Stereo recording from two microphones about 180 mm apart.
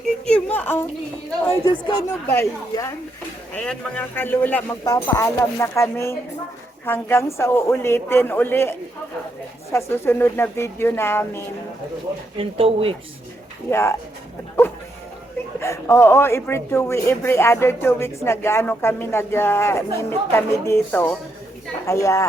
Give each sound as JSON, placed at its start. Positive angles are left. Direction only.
{"t": 0.3, "sound": "speech", "side_deg": 5}
{"t": 1.6, "sound": "speech", "side_deg": 20}
{"t": 12.4, "sound": "speech", "side_deg": -30}
{"t": 13.7, "sound": "speech", "side_deg": 15}
{"t": 15.6, "sound": "speech", "side_deg": 15}